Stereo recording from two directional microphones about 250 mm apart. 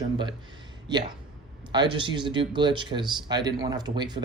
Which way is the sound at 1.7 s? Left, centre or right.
Centre.